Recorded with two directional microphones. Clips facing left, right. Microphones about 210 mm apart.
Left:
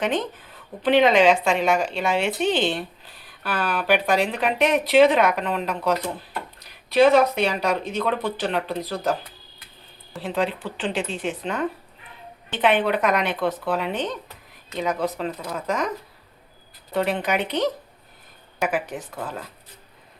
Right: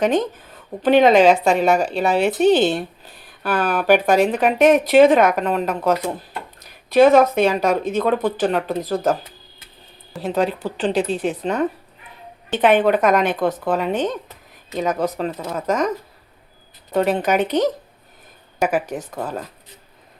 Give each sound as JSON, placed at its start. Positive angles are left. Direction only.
{"t": 0.0, "sound": "speech", "side_deg": -40}
{"t": 10.2, "sound": "speech", "side_deg": -40}
{"t": 16.9, "sound": "speech", "side_deg": -45}